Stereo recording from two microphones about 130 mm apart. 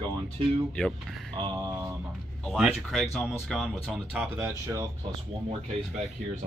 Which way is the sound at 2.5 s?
Centre (ahead or behind).